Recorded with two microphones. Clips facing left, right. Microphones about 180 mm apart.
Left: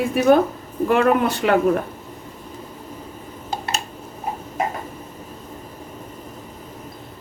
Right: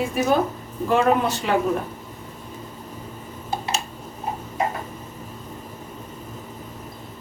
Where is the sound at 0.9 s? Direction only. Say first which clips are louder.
Left 2 dB; 60° left (ahead or behind).